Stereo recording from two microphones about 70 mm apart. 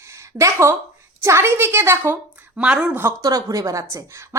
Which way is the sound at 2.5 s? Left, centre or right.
Centre.